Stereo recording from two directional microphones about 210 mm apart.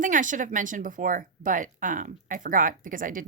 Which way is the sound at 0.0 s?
40° right (ahead or behind).